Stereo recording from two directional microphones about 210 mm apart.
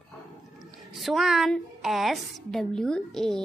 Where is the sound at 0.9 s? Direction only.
Centre (ahead or behind).